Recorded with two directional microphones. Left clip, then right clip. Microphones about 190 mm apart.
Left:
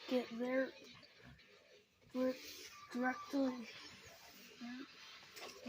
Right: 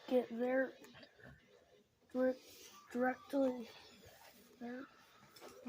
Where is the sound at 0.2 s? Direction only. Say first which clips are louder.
Right 4 dB; 40° right (ahead or behind).